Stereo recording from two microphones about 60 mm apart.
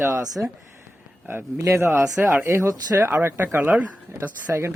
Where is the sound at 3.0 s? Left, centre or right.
Right.